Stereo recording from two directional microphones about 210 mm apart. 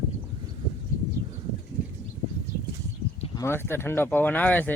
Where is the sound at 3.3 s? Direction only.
10° left (ahead or behind).